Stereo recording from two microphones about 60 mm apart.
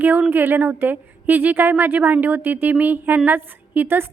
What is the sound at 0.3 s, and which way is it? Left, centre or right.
A woman's voice, right.